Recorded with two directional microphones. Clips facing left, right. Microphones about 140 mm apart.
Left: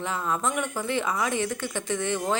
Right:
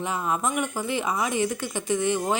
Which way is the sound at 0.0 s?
15° right (ahead or behind).